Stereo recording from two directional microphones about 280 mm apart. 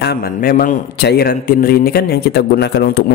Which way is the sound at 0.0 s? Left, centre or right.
Left.